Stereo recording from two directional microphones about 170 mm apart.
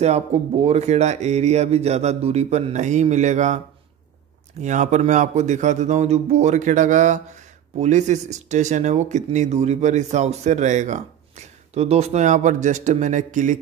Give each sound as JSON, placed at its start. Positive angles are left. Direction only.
{"t": 0.0, "sound": "speech", "side_deg": -40}